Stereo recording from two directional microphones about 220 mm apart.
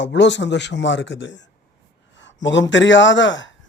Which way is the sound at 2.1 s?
55° left (ahead or behind).